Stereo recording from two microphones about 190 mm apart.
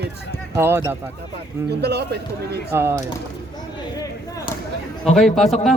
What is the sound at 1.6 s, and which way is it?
Speech, 60° right (ahead or behind).